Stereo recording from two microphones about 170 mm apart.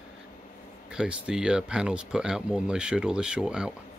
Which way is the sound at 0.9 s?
5° right (ahead or behind).